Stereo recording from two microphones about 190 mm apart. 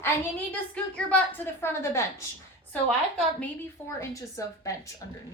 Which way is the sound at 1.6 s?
15° left (ahead or behind).